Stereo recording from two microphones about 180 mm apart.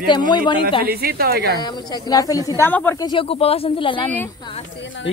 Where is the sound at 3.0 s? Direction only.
25° left (ahead or behind).